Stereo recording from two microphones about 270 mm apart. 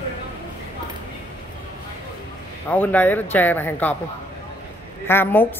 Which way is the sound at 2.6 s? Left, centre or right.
Centre.